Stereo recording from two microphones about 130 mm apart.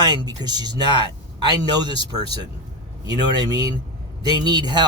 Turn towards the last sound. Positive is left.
turn(degrees=-35)  # may be behind; listen again after turning